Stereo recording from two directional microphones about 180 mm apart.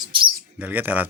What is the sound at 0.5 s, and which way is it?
Speech, 10° right (ahead or behind).